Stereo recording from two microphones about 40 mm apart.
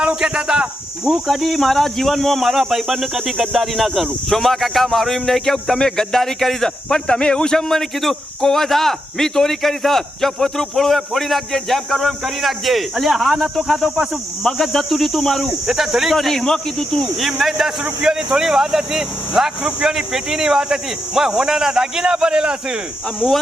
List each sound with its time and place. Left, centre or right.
0.2 s speech: centre
1.3 s speech: centre; by 7.6 s left
7.7 s speech: centre
15.6 s speech: centre
16.1 s speech: centre
17.2 s speech: centre
18.0 s speech: centre